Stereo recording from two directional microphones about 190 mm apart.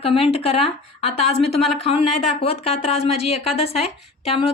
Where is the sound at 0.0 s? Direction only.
30° left (ahead or behind).